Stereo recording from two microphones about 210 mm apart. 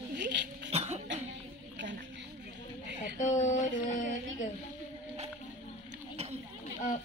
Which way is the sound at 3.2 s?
35° left (ahead or behind).